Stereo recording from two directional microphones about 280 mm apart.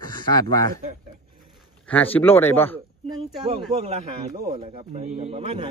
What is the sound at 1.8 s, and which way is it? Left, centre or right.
Speech, centre.